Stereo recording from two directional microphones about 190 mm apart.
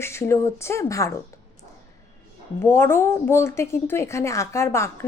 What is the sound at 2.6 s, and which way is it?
Speech, 15° left (ahead or behind).